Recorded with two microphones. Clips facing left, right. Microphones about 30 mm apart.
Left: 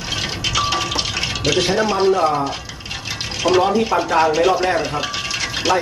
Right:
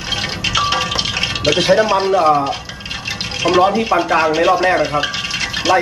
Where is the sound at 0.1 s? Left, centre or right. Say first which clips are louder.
Right 3 dB; centre.